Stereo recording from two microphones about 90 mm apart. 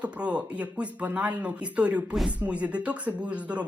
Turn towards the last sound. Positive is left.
turn(degrees=-15)  # may be behind; listen again after turning